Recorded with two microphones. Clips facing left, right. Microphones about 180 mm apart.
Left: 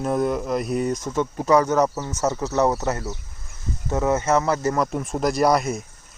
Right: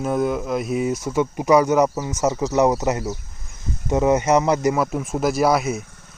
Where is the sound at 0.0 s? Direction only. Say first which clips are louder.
Right 1 dB; centre (ahead or behind); by 4.7 s 20° right (ahead or behind).